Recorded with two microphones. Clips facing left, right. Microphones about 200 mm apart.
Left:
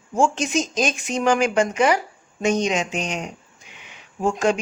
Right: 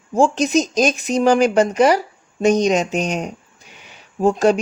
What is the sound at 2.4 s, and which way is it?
Speech, 40° right (ahead or behind).